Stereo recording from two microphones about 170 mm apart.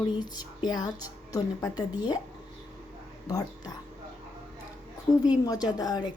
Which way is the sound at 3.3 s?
20° left (ahead or behind).